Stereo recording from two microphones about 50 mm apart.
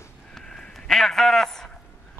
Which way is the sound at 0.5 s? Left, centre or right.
Centre.